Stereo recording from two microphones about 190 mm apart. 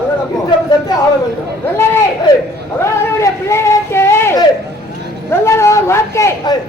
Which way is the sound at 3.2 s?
15° left (ahead or behind).